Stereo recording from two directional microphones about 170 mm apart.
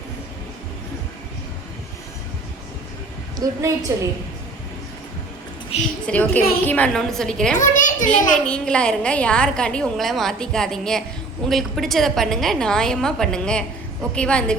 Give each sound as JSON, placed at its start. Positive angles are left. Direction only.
{"t": 3.3, "sound": "a woman's voice", "side_deg": -15}
{"t": 6.1, "sound": "a woman's voice", "side_deg": 10}
{"t": 7.5, "sound": "a child's voice", "side_deg": 50}
{"t": 8.4, "sound": "a woman's voice", "side_deg": 5}